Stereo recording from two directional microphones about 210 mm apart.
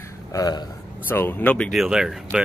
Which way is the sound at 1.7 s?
Centre (ahead or behind).